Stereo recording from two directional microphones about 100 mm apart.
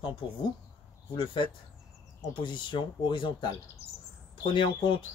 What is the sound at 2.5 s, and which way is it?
Speech, 55° left (ahead or behind).